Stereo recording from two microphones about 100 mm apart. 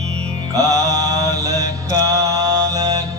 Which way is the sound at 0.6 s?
35° right (ahead or behind).